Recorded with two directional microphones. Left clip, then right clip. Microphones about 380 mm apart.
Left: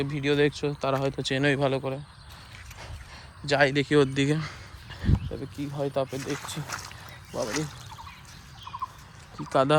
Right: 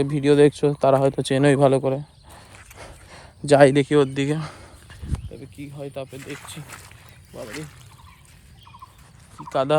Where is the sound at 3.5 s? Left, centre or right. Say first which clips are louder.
Right 8 dB; centre.